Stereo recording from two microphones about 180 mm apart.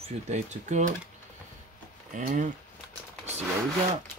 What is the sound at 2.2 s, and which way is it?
Speech, 50° right (ahead or behind).